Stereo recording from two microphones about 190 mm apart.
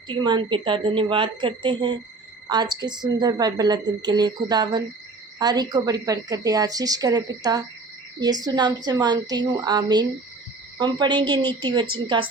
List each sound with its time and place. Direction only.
0.1 s a woman's voice: 25° right (ahead or behind)